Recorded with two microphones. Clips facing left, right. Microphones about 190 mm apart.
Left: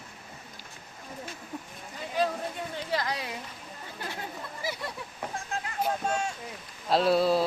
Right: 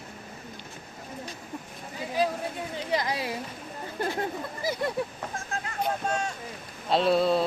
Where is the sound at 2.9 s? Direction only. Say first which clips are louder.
Right 4 dB; 20° right (ahead or behind).